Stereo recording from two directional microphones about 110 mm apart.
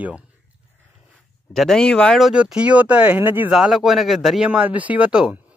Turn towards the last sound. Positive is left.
turn(degrees=-10)  # may be behind; listen again after turning